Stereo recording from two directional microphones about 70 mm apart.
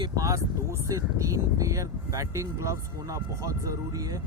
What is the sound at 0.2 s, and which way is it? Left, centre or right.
Speech, right.